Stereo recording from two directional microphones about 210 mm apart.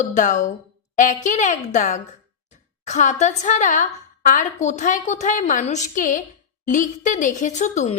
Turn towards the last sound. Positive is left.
turn(degrees=35)  # may be behind; listen again after turning